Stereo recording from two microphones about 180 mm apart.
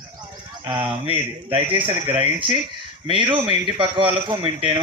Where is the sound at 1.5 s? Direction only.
25° right (ahead or behind).